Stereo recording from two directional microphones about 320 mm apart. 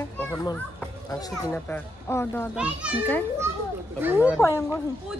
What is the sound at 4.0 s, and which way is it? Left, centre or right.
Speech, centre.